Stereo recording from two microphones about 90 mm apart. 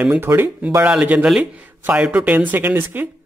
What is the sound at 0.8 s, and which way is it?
Speech, 15° right (ahead or behind).